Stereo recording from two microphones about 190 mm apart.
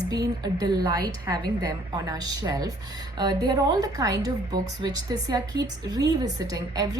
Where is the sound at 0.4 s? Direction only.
20° right (ahead or behind).